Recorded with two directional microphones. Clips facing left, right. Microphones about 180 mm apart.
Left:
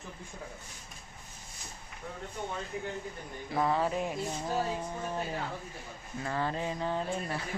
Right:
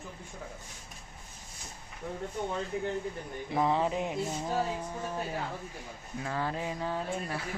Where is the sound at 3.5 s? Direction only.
15° right (ahead or behind).